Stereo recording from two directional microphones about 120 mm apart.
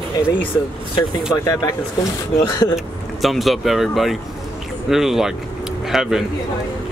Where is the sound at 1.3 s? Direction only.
30° left (ahead or behind).